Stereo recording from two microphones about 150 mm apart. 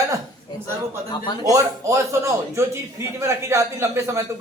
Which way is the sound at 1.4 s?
20° right (ahead or behind).